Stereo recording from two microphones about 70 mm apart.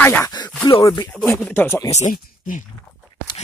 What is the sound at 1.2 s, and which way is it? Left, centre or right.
Speech, left.